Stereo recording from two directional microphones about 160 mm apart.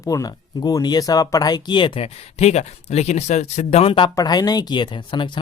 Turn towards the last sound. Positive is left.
turn(degrees=30)  # may be behind; listen again after turning